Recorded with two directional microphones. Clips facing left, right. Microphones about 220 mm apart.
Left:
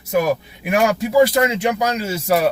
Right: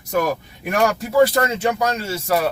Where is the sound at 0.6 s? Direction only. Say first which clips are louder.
Left 1 dB; 10° left (ahead or behind).